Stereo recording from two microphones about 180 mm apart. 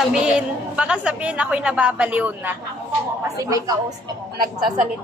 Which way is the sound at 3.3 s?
20° right (ahead or behind).